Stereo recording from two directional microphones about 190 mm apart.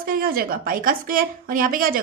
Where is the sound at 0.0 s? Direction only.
50° right (ahead or behind).